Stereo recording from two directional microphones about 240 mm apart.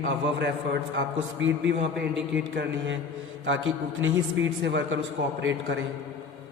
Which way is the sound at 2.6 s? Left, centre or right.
Right.